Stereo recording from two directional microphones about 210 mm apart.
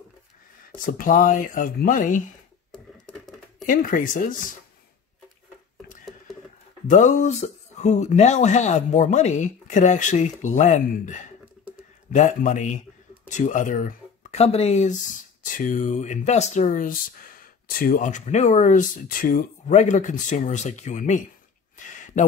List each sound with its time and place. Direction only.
0.7 s speech: 40° left (ahead or behind)
2.7 s typing: centre (ahead or behind)
3.6 s speech: 40° left (ahead or behind)
6.9 s speech: 35° left (ahead or behind)
21.8 s a sound: 35° left (ahead or behind)